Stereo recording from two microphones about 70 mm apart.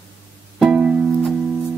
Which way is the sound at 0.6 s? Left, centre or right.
Centre.